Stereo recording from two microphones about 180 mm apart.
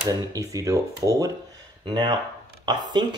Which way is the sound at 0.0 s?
20° right (ahead or behind).